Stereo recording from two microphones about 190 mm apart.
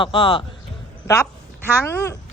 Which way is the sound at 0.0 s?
25° left (ahead or behind).